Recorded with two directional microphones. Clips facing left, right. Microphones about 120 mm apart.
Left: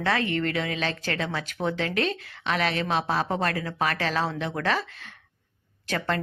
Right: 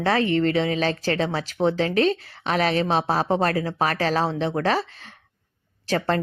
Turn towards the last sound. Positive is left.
turn(degrees=-35)  # may be behind; listen again after turning